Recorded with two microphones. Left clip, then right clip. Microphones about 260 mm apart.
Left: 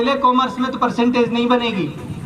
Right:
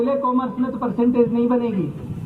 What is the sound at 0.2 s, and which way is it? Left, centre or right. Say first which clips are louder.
Speech: left 6 dB; left.